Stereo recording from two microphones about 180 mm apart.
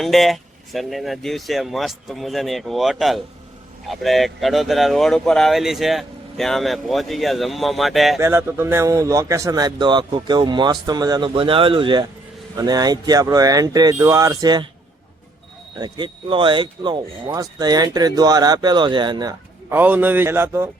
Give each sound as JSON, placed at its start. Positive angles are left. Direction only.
{"t": 0.0, "sound": "speech", "side_deg": 0}
{"t": 8.2, "sound": "speech", "side_deg": -15}
{"t": 15.7, "sound": "speech", "side_deg": -25}
{"t": 19.7, "sound": "speech", "side_deg": -10}